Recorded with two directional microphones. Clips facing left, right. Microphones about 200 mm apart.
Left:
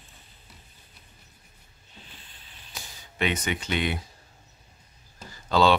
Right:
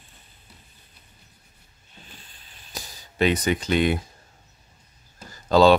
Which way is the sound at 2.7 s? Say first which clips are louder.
Right 5 dB; 35° right (ahead or behind).